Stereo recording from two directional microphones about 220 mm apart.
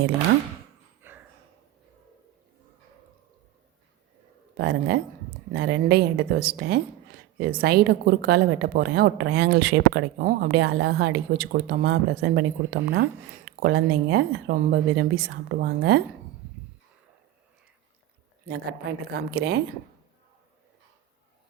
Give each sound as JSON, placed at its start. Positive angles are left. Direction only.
{"t": 1.0, "sound": "dog", "side_deg": -10}
{"t": 4.5, "sound": "a woman's voice", "side_deg": -50}
{"t": 19.3, "sound": "a woman's voice", "side_deg": -50}